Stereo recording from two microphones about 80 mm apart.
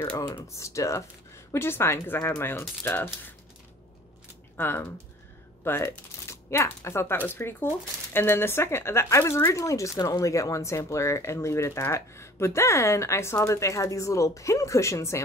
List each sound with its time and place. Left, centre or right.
0.6 s speech: left
2.8 s typewriter: left
4.6 s typewriter: left
5.6 s speech: left
7.2 s typewriter: left
8.1 s speech: left